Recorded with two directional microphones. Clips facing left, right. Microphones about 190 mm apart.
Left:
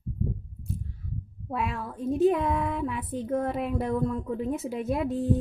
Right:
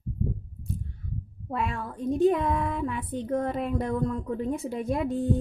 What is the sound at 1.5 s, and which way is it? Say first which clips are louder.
Speech: even; 5° left (ahead or behind).